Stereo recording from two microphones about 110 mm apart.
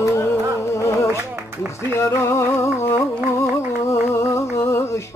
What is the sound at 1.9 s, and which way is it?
Speech, 25° left (ahead or behind).